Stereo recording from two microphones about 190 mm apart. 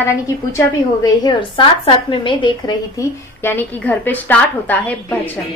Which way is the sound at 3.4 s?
10° left (ahead or behind).